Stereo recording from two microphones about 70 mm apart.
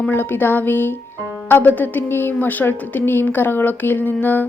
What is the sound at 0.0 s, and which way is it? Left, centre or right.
A woman's voice, left.